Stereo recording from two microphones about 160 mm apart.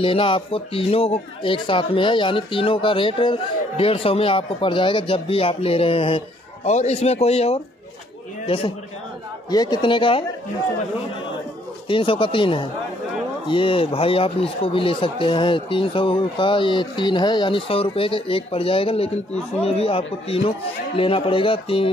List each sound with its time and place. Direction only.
0.0 s speech: 35° left (ahead or behind)
9.5 s speech: 25° left (ahead or behind)
11.9 s speech: 30° left (ahead or behind)